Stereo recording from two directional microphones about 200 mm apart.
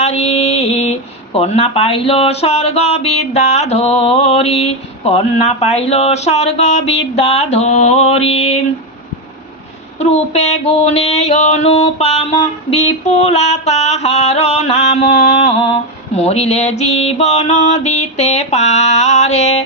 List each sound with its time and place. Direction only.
0.0 s mantra: 30° left (ahead or behind)
10.0 s mantra: 35° left (ahead or behind)